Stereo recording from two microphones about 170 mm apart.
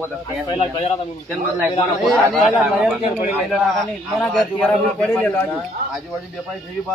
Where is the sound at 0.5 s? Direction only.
40° left (ahead or behind).